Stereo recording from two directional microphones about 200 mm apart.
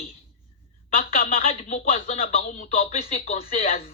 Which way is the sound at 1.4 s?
35° left (ahead or behind).